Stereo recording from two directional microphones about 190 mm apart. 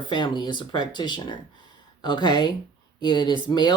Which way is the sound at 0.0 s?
25° left (ahead or behind).